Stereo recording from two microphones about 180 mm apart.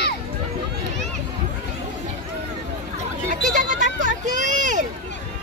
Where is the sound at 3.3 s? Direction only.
45° right (ahead or behind).